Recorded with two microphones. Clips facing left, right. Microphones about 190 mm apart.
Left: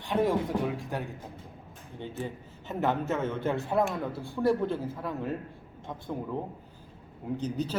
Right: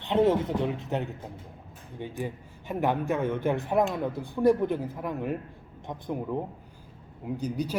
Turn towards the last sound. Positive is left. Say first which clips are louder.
# right 1 dB
turn(degrees=-10)  # may be behind; listen again after turning